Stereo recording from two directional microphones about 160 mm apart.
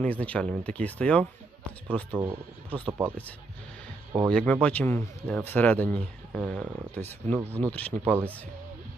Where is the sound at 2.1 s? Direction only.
15° right (ahead or behind).